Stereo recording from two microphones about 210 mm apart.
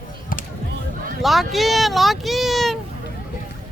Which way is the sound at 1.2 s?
Centre (ahead or behind).